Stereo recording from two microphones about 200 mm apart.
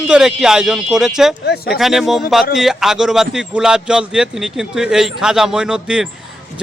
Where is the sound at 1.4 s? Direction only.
55° left (ahead or behind).